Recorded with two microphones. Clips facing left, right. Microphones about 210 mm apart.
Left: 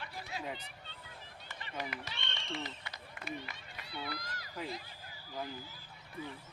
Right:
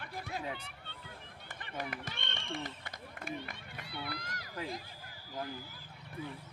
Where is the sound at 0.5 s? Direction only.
60° right (ahead or behind).